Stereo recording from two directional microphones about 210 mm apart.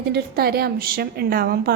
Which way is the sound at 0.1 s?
50° right (ahead or behind).